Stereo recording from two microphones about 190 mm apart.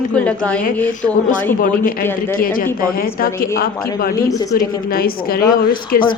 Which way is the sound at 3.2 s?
50° left (ahead or behind).